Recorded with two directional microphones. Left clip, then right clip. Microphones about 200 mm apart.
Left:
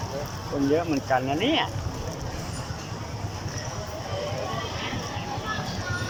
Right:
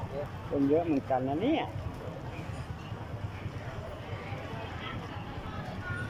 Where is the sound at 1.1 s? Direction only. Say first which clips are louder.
Left 8 dB; 20° right (ahead or behind).